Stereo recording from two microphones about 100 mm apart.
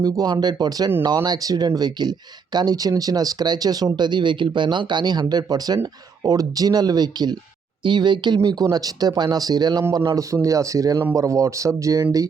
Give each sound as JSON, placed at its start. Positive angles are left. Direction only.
{"t": 0.0, "sound": "speech", "side_deg": -40}
{"t": 8.4, "sound": "speech", "side_deg": -40}